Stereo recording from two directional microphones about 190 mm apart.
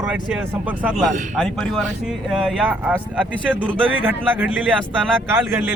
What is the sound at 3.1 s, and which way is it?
Speech, 5° left (ahead or behind).